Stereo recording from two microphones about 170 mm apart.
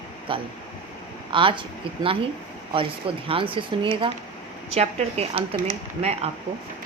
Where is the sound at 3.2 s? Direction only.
30° right (ahead or behind).